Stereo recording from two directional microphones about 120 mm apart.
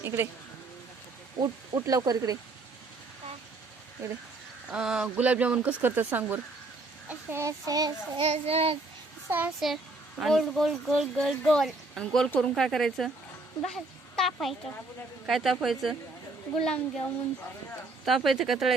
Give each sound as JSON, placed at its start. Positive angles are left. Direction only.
{"t": 0.0, "sound": "speech", "side_deg": -20}
{"t": 1.4, "sound": "speech", "side_deg": -30}
{"t": 4.7, "sound": "a child's voice", "side_deg": -5}
{"t": 8.2, "sound": "a child's voice", "side_deg": -55}
{"t": 9.6, "sound": "speech", "side_deg": -5}
{"t": 18.0, "sound": "speech", "side_deg": 0}